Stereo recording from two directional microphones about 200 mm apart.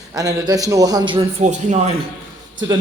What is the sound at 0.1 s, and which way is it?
A man's voice, 15° right (ahead or behind).